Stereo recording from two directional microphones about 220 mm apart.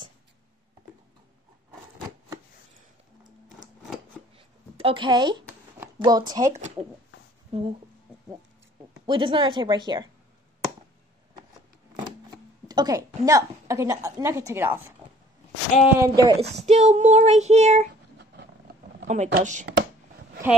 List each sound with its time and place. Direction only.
4.4 s a sound: 25° right (ahead or behind)
5.9 s a woman's voice: 20° right (ahead or behind)
7.5 s speech: 25° right (ahead or behind)
9.0 s speech: 20° right (ahead or behind)
12.6 s a woman's voice: 15° right (ahead or behind)
16.6 s child singing: 30° right (ahead or behind)
19.0 s speech: 30° right (ahead or behind)
19.3 s child singing: 35° right (ahead or behind)